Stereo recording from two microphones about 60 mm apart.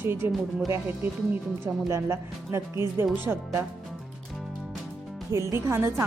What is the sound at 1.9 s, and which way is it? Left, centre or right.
Speech, right.